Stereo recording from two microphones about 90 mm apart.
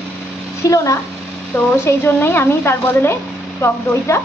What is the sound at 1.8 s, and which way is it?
Speech, 25° left (ahead or behind).